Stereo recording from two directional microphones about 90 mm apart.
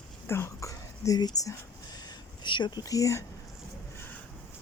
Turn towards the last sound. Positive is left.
turn(degrees=35)  # may be behind; listen again after turning